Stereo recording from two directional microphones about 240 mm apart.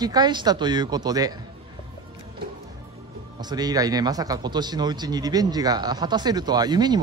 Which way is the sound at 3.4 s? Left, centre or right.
Centre.